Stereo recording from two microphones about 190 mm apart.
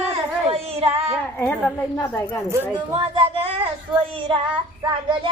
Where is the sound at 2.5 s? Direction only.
15° right (ahead or behind).